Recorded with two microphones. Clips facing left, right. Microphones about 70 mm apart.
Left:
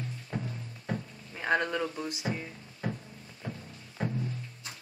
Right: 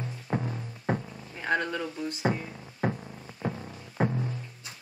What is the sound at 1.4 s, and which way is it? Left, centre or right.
Speech, centre.